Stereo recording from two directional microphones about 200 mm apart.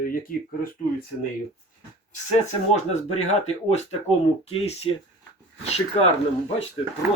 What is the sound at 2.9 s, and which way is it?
Speech, 35° left (ahead or behind).